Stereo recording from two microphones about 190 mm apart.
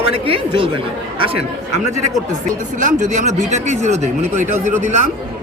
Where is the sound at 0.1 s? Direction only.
30° right (ahead or behind).